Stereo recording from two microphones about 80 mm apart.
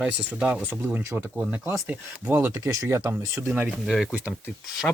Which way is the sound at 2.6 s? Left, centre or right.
Right.